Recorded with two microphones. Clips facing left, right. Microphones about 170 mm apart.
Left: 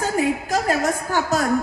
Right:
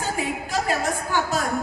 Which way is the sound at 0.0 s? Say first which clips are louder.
Left 6 dB; 45° left (ahead or behind).